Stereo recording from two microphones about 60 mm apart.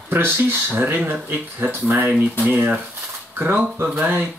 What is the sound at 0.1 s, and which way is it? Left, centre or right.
Speech, right.